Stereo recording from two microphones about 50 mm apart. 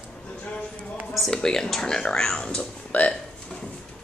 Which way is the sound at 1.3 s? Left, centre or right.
Centre.